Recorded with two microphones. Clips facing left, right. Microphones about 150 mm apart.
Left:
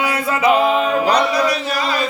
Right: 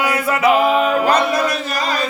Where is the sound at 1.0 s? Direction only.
50° right (ahead or behind).